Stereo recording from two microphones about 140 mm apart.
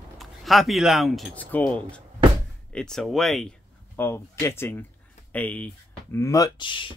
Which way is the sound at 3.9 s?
15° left (ahead or behind).